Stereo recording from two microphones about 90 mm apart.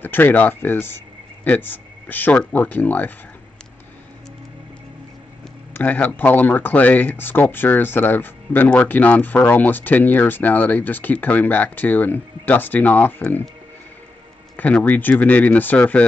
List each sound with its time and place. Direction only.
0.0 s speech: 20° left (ahead or behind)
5.7 s speech: 20° left (ahead or behind)
14.6 s speech: 15° left (ahead or behind)